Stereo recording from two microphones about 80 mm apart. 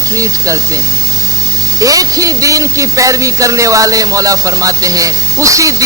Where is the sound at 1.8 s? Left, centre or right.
Right.